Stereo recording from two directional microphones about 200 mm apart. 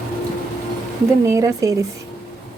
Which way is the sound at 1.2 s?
15° right (ahead or behind).